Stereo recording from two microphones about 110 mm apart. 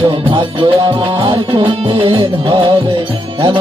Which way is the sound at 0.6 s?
50° right (ahead or behind).